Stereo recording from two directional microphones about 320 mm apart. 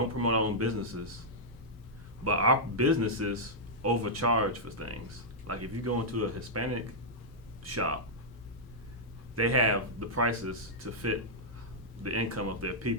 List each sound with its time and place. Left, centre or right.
0.2 s speech: right
2.2 s speech: right
9.3 s speech: right